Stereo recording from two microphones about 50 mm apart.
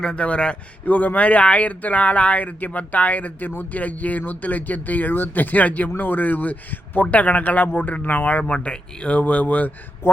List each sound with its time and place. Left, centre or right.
0.0 s a man's voice: centre
0.9 s a man's voice: left